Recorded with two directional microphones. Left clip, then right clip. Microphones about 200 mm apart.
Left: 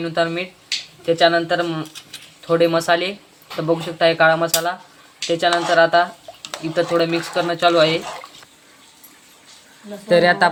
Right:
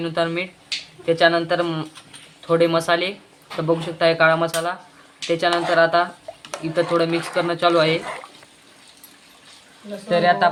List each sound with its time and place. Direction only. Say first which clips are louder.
0.0 s speech: left 2 dB; 5° left (ahead or behind)
10.1 s speech: left 3 dB; 30° left (ahead or behind)